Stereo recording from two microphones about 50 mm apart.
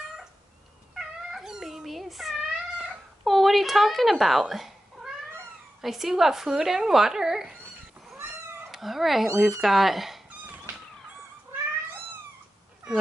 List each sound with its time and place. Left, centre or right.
0.9 s cat: centre
2.5 s cat: centre
3.3 s cat: centre
5.8 s speech: centre
8.7 s speech: centre
11.5 s cat: right